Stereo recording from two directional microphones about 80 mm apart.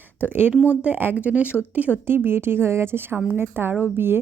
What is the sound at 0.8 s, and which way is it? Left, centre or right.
Speech, right.